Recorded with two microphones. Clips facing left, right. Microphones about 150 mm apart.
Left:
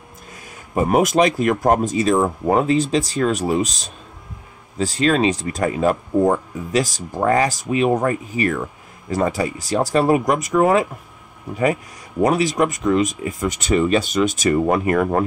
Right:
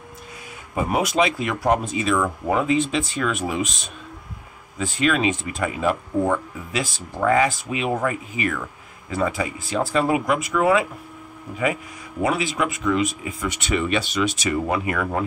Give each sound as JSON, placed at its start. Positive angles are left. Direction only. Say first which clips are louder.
{"t": 0.7, "sound": "speech", "louder": "left 5 dB", "side_deg": 45}